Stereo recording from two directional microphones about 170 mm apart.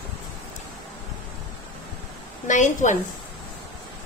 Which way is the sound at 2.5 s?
45° left (ahead or behind).